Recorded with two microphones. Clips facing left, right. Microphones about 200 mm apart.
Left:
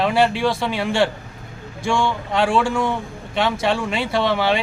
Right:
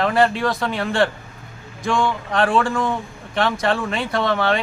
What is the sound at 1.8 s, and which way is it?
Speech, 25° left (ahead or behind).